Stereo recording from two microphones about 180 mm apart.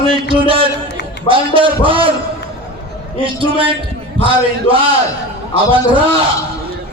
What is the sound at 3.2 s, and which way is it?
Speech, 30° right (ahead or behind).